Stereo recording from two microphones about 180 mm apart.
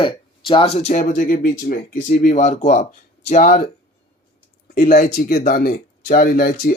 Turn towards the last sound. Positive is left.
turn(degrees=55)  # may be behind; listen again after turning